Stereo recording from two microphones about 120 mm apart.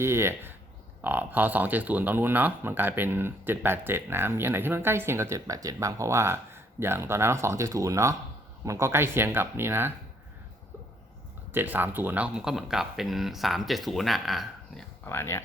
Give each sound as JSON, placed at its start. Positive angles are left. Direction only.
{"t": 0.0, "sound": "speech", "side_deg": -20}
{"t": 11.5, "sound": "speech", "side_deg": -15}
{"t": 15.0, "sound": "speech", "side_deg": 20}